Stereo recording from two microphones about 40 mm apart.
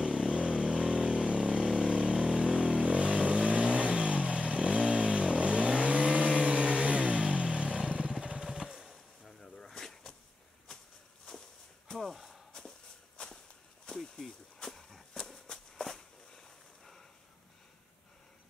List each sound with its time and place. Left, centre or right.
0.0 s vehicle: centre
0.3 s vehicle: centre
3.2 s vehicle: centre
3.4 s vehicle: right; by 9.0 s centre
9.2 s a sound: centre
11.9 s a sound: centre
13.2 s walk: left; by 17.0 s centre